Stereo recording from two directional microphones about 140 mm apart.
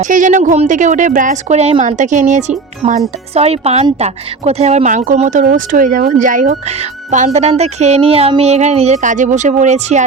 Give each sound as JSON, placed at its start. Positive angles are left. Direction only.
{"t": 0.0, "sound": "speech", "side_deg": -65}
{"t": 2.8, "sound": "speech", "side_deg": -50}